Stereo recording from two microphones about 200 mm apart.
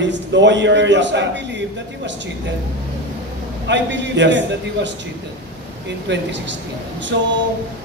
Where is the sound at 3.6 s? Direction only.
60° right (ahead or behind).